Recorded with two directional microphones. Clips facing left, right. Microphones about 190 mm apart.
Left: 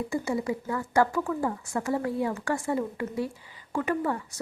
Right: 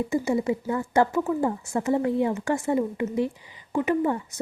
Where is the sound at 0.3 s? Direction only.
25° right (ahead or behind).